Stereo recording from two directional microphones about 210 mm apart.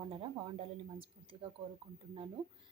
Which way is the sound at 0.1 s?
25° right (ahead or behind).